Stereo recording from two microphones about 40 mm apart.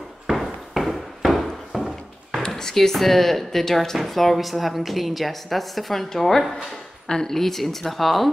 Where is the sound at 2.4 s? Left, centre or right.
Centre.